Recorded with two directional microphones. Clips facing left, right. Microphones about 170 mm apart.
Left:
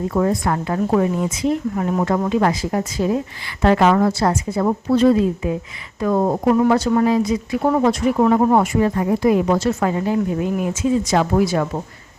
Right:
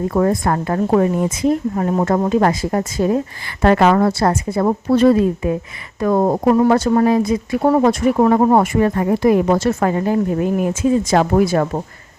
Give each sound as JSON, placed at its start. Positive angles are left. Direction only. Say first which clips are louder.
{"t": 0.1, "sound": "speech", "louder": "right 2 dB", "side_deg": -50}